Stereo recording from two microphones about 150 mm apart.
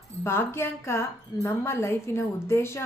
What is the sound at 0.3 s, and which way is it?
A woman's voice, 15° left (ahead or behind).